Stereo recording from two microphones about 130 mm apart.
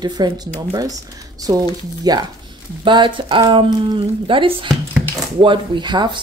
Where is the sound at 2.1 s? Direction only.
30° right (ahead or behind).